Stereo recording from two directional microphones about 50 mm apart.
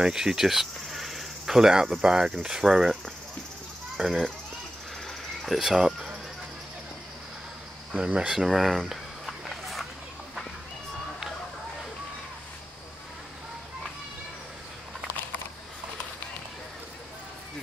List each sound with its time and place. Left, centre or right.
0.0 s speech: centre
5.4 s speech: centre
7.9 s speech: right
8.3 s speech: centre
9.5 s a sound: centre